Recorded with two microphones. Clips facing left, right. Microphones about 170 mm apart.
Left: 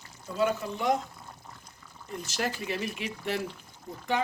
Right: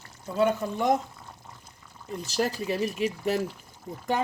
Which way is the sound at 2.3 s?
35° right (ahead or behind).